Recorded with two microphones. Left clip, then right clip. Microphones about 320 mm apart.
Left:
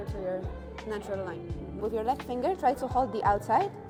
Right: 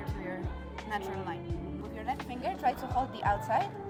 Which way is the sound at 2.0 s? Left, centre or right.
Left.